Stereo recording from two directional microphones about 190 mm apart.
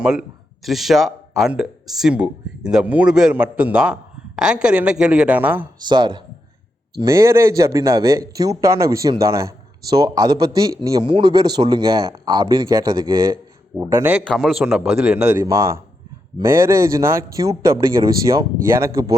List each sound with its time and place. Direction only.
0.0 s speech: 5° right (ahead or behind)
5.8 s a man's voice: 25° right (ahead or behind)
14.3 s speech: centre (ahead or behind); by 19.1 s 15° right (ahead or behind)